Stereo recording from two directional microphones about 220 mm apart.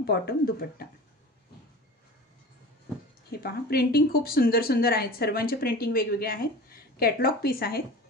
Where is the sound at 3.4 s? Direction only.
45° left (ahead or behind).